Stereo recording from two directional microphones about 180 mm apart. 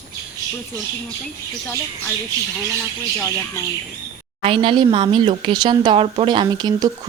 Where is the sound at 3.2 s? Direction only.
15° left (ahead or behind).